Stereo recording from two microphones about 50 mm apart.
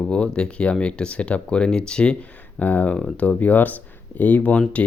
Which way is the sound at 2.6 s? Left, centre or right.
Left.